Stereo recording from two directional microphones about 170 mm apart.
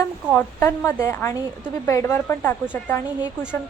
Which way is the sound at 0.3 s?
15° left (ahead or behind).